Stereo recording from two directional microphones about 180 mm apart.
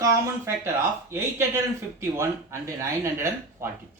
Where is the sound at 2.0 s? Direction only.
15° right (ahead or behind).